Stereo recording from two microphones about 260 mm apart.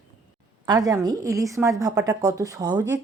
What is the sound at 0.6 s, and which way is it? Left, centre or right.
Speech, centre.